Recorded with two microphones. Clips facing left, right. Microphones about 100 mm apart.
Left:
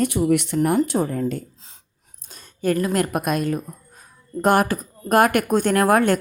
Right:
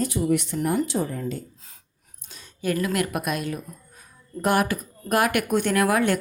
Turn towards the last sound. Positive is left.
turn(degrees=45)  # may be behind; listen again after turning